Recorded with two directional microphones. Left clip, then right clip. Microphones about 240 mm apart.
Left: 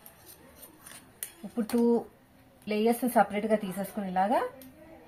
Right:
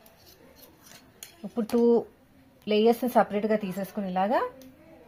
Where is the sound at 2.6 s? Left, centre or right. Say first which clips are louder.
Right 5 dB; right.